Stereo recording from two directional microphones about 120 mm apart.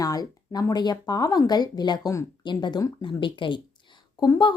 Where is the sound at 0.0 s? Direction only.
30° left (ahead or behind).